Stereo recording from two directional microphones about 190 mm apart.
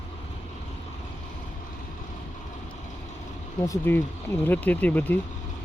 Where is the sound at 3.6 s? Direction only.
15° left (ahead or behind).